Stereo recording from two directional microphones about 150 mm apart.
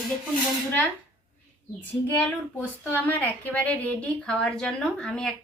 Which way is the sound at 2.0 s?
10° left (ahead or behind).